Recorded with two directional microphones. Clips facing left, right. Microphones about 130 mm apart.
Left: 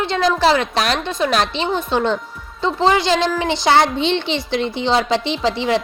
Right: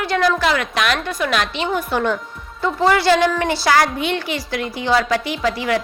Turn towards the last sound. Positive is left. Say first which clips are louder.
# left 2 dB
turn(degrees=25)  # may be behind; listen again after turning